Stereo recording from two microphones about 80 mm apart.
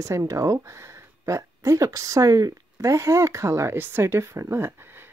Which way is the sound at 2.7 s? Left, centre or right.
Right.